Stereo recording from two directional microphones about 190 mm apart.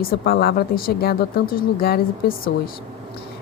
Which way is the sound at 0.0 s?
50° left (ahead or behind).